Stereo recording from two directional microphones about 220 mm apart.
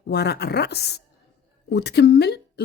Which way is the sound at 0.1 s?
50° left (ahead or behind).